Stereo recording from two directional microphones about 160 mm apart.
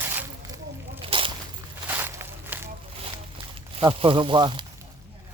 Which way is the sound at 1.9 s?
10° right (ahead or behind).